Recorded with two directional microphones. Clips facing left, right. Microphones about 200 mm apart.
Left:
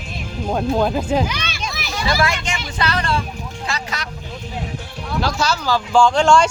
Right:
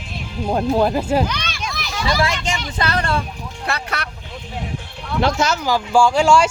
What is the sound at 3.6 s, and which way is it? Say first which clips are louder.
Speech: right 3 dB; 60° right (ahead or behind).